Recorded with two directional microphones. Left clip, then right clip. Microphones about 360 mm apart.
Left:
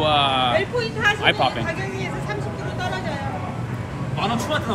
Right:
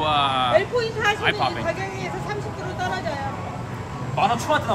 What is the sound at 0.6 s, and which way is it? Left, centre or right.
Vehicle, right.